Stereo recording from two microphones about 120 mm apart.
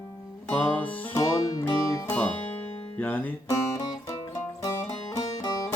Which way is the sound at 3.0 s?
15° left (ahead or behind).